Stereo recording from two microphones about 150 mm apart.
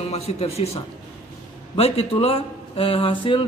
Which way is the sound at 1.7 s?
40° left (ahead or behind).